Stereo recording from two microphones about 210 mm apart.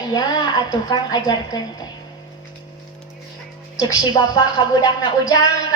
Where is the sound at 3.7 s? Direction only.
20° left (ahead or behind).